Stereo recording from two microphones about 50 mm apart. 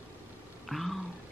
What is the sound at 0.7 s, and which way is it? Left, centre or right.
Speech, centre.